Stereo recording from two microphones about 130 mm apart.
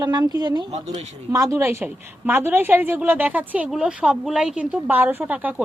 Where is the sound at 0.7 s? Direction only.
60° right (ahead or behind).